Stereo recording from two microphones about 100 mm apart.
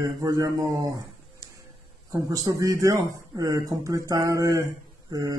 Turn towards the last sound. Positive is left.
turn(degrees=-40)  # may be behind; listen again after turning